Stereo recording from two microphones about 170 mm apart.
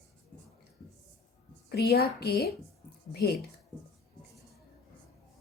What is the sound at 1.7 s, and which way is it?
A woman's voice, 70° left (ahead or behind).